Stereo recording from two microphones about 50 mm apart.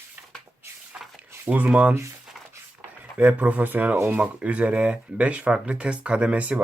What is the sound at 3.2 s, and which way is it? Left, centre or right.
Speech, right.